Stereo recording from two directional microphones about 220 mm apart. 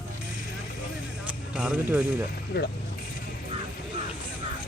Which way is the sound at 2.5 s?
45° left (ahead or behind).